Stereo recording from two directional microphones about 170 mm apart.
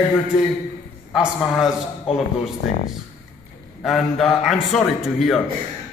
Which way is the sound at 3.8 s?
Centre (ahead or behind).